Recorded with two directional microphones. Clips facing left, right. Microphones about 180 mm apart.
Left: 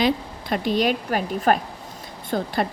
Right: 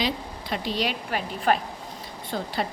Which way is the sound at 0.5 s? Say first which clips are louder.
Left 7 dB; 50° left (ahead or behind).